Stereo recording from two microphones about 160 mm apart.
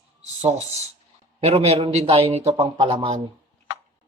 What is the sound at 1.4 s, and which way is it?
Speech, 40° right (ahead or behind).